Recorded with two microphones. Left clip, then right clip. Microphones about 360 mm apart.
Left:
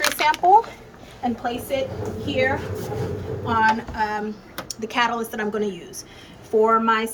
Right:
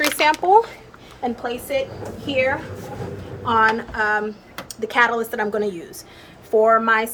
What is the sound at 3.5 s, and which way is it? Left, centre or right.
A woman's voice, centre.